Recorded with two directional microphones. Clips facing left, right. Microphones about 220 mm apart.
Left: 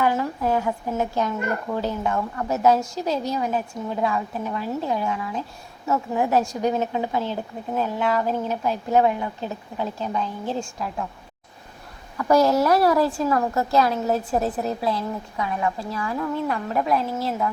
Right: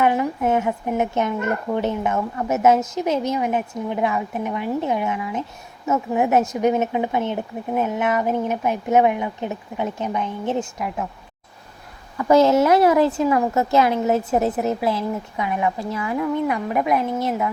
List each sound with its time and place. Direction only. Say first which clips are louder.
0.0 s speech: right 3 dB; 20° right (ahead or behind)
12.1 s a woman's voice: right 3 dB; 20° right (ahead or behind)